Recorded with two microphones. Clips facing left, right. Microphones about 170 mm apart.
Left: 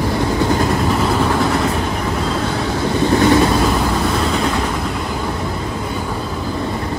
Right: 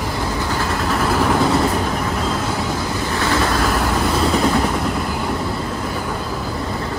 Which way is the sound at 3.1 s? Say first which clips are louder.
Left 8 dB; 20° left (ahead or behind).